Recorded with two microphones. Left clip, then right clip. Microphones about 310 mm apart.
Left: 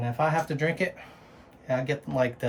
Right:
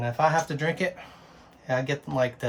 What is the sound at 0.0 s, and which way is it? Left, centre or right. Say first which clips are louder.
Speech: right 3 dB; centre.